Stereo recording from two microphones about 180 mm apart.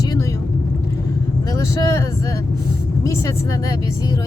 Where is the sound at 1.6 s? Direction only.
20° left (ahead or behind).